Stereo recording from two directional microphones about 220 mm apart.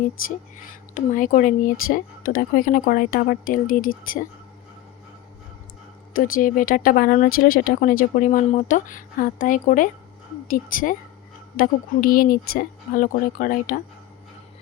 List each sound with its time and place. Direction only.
0.9 s speech: 35° left (ahead or behind)
6.1 s speech: 40° left (ahead or behind)